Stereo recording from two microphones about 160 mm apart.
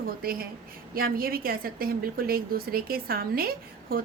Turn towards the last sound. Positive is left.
turn(degrees=-65)  # may be behind; listen again after turning